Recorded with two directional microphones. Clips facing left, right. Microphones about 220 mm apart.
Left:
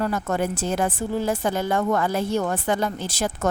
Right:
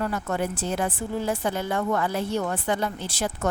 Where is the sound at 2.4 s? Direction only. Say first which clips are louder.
Left 3 dB; 45° left (ahead or behind).